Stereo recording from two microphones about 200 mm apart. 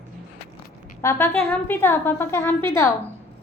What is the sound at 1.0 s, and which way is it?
A woman's voice, 15° left (ahead or behind).